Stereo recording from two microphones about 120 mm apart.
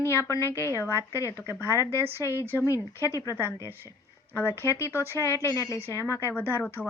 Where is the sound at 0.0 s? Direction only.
20° left (ahead or behind).